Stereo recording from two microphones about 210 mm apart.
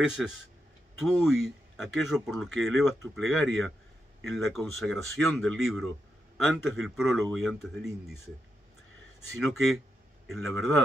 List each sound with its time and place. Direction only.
0.2 s a man's voice: centre (ahead or behind)
9.4 s a man's voice: centre (ahead or behind)